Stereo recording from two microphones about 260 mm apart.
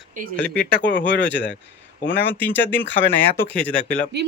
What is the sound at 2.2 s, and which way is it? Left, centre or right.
Speech, centre.